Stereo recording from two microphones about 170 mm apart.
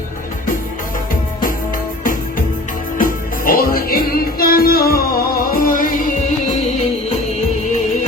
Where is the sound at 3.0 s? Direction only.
55° left (ahead or behind).